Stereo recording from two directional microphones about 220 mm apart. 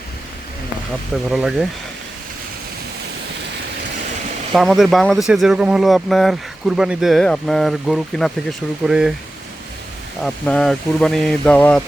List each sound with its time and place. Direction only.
1.3 s speech: centre (ahead or behind)
4.5 s speech: centre (ahead or behind)
10.2 s speech: 5° left (ahead or behind)